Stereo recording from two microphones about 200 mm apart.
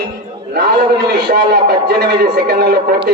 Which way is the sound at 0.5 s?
55° right (ahead or behind).